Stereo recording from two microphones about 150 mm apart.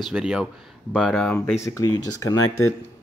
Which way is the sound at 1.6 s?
20° left (ahead or behind).